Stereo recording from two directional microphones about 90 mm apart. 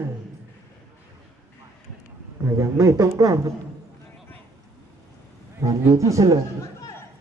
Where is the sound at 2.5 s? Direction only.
40° right (ahead or behind).